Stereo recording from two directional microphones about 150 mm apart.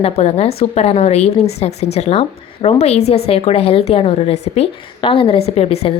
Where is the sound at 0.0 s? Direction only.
45° left (ahead or behind).